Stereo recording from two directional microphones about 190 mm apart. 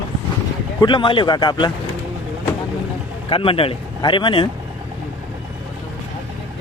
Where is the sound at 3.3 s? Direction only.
30° left (ahead or behind).